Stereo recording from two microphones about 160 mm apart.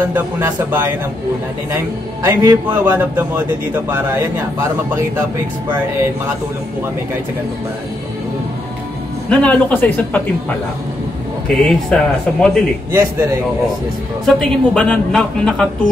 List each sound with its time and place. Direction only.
0.1 s a man's voice: 10° right (ahead or behind)
2.2 s a man's voice: 15° right (ahead or behind)
9.3 s speech: 5° left (ahead or behind)
11.6 s a man's voice: 5° left (ahead or behind)
12.9 s a man's voice: 20° right (ahead or behind)
14.2 s a man's voice: 5° left (ahead or behind)